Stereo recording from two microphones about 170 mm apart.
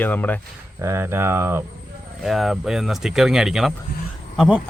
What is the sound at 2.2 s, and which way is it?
Speech, centre (ahead or behind).